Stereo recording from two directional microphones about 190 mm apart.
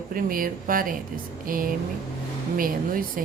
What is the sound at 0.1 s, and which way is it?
A woman's voice, 50° right (ahead or behind).